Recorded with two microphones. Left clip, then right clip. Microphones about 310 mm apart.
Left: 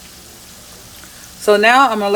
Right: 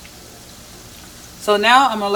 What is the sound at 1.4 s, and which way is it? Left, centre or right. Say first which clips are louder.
Speech: left 2 dB; centre.